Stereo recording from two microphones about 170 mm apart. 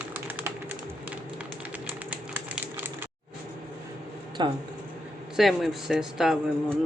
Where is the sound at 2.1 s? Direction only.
10° right (ahead or behind).